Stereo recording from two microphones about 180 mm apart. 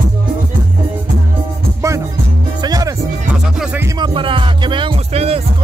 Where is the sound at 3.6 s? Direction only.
10° right (ahead or behind).